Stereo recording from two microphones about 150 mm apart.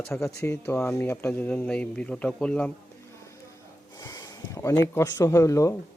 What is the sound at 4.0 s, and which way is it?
Speech, 25° left (ahead or behind).